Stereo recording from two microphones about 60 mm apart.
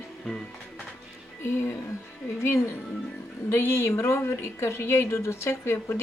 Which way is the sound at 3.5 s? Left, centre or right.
Left.